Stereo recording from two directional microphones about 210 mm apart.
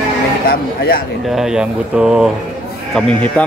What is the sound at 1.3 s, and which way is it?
Speech, 5° right (ahead or behind).